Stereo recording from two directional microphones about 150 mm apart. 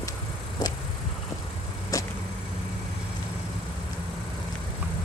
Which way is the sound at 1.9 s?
20° left (ahead or behind).